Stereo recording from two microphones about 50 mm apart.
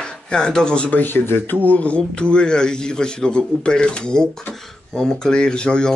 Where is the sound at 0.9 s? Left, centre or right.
Left.